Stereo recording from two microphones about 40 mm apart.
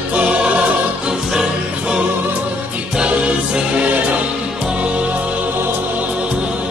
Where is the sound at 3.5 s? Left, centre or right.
Right.